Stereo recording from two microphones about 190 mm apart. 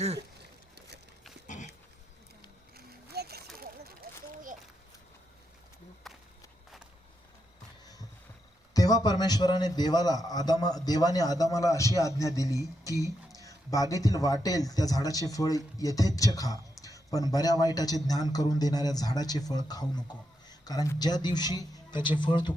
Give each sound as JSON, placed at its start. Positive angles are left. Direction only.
{"t": 2.7, "sound": "a sound", "side_deg": -55}
{"t": 6.0, "sound": "walk", "side_deg": 0}
{"t": 8.7, "sound": "a man's voice", "side_deg": 20}